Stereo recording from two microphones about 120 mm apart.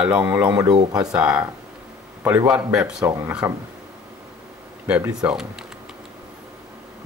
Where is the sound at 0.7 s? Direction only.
30° right (ahead or behind).